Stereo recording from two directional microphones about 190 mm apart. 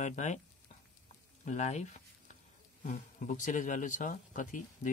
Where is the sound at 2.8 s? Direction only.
40° left (ahead or behind).